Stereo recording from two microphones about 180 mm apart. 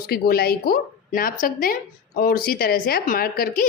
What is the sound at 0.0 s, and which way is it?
Speech, 55° left (ahead or behind).